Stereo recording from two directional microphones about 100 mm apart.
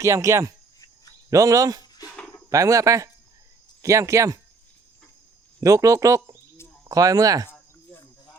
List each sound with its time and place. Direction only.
0.0 s speech: 30° right (ahead or behind)
5.5 s speech: 35° right (ahead or behind)